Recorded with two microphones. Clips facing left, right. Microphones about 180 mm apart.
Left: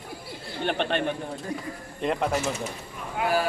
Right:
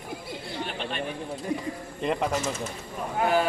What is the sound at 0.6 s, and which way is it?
Speech, 65° left (ahead or behind).